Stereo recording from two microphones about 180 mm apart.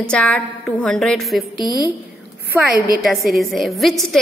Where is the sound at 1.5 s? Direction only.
20° left (ahead or behind).